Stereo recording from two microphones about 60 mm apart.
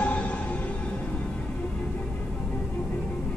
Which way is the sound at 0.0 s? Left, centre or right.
Left.